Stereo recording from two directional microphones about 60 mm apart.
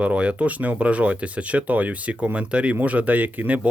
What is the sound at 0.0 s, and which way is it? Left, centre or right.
Speech, right.